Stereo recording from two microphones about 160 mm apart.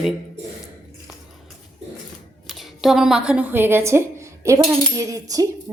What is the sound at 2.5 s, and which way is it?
A woman's voice, centre (ahead or behind).